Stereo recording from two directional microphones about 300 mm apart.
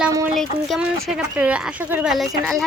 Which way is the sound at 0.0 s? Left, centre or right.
Centre.